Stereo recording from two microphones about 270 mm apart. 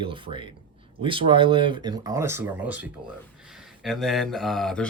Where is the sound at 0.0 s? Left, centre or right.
Centre.